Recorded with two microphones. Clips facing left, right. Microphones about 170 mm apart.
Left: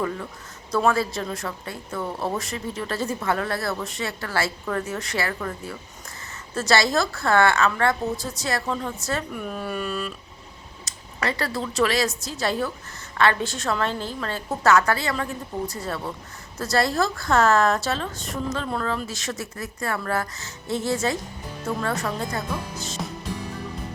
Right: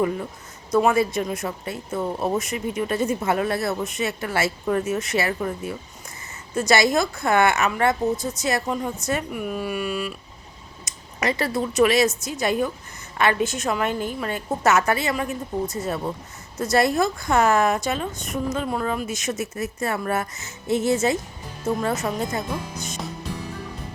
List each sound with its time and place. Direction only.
0.0 s a woman's voice: 20° right (ahead or behind)